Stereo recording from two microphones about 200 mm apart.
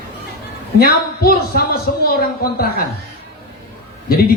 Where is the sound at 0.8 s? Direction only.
50° left (ahead or behind).